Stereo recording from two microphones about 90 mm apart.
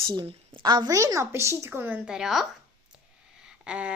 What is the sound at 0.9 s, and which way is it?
Speech, 35° right (ahead or behind).